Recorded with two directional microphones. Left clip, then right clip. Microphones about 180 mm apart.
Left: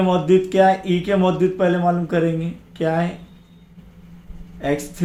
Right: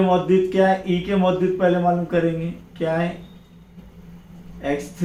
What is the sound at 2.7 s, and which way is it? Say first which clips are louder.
Speech: left 2 dB; 50° left (ahead or behind).